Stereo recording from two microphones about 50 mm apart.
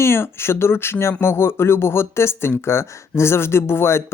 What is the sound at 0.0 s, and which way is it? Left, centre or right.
Speech, left.